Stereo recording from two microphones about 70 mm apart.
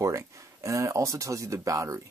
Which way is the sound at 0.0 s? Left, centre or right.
Right.